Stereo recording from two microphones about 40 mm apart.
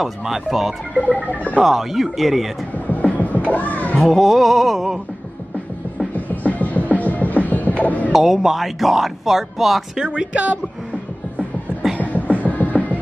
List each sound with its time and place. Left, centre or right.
0.0 s speech: centre
0.9 s music: left
1.6 s speech: centre
2.9 s cat: left
4.0 s speech: centre
6.1 s music: left
8.1 s speech: centre
9.9 s speech: right
12.0 s music: left